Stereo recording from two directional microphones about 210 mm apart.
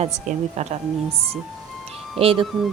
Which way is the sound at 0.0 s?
30° right (ahead or behind).